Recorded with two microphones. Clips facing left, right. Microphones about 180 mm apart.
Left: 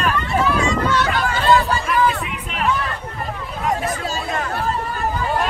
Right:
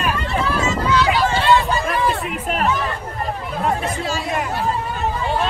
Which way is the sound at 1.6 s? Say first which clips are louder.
Left 1 dB; 35° right (ahead or behind).